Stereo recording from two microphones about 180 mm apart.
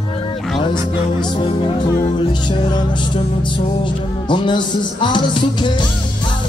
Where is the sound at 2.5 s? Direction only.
25° left (ahead or behind).